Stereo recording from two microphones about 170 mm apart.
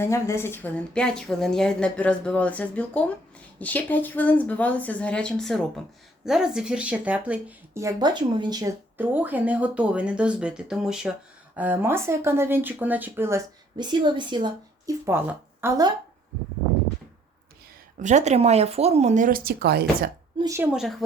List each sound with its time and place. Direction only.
0.0 s a woman's voice: 15° left (ahead or behind); by 8.7 s 25° right (ahead or behind)
9.0 s speech: 10° right (ahead or behind)
13.7 s a woman's voice: 25° right (ahead or behind)
15.0 s speech: 15° right (ahead or behind)
18.0 s speech: 40° right (ahead or behind); by 20.1 s 70° right (ahead or behind)
20.4 s speech: 15° right (ahead or behind)
20.7 s speech: centre (ahead or behind)